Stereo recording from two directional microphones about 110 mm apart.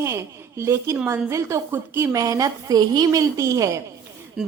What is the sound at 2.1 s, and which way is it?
A woman's voice, 30° right (ahead or behind).